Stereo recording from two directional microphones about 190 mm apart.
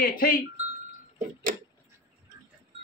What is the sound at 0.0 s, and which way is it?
Wind chime, 45° left (ahead or behind).